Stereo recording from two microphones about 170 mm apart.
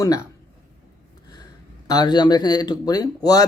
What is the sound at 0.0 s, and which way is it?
Mantra, 20° left (ahead or behind).